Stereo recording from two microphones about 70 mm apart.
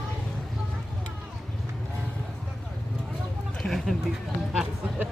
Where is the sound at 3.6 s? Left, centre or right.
Centre.